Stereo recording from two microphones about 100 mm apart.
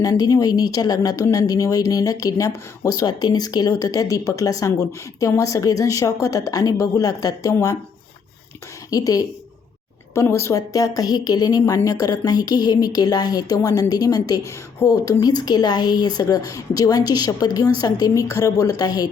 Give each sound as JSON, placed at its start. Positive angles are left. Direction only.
{"t": 0.0, "sound": "speech", "side_deg": 35}
{"t": 8.9, "sound": "speech", "side_deg": 35}